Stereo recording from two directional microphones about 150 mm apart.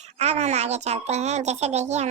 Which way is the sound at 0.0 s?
50° right (ahead or behind).